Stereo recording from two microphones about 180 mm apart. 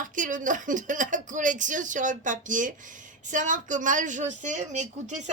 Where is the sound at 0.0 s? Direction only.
45° right (ahead or behind).